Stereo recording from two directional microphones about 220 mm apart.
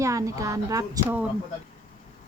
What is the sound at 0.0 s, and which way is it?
Speech, 15° right (ahead or behind).